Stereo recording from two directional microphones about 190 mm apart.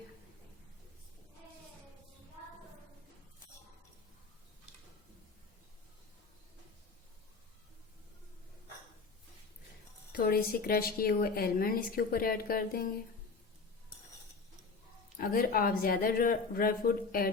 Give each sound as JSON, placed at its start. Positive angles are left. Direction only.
{"t": 10.1, "sound": "a woman's voice", "side_deg": 55}
{"t": 15.2, "sound": "a woman's voice", "side_deg": 50}